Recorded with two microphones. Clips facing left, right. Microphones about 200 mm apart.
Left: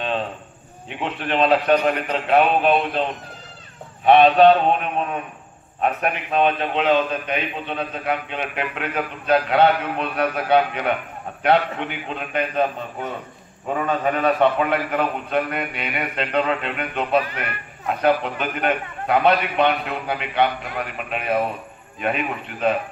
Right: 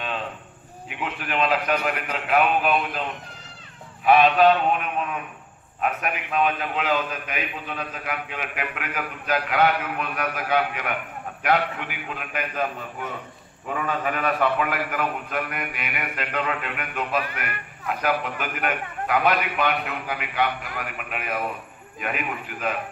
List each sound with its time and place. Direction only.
1.0 s a man's voice: 30° left (ahead or behind)